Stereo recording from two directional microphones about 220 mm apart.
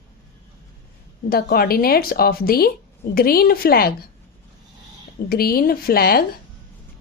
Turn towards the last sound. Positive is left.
turn(degrees=45)  # may be behind; listen again after turning